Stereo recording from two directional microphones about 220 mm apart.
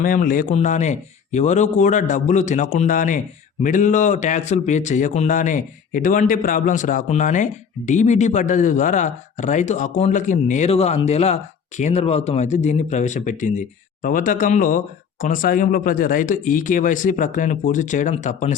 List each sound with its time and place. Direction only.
0.0 s speech: 40° left (ahead or behind)